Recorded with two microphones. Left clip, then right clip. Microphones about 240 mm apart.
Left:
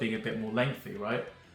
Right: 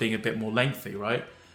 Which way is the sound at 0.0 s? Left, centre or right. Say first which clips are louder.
Right 5 dB; right.